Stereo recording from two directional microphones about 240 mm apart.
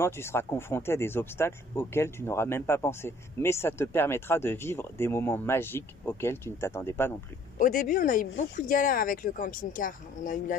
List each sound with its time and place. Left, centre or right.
0.0 s speech: centre
7.5 s speech: left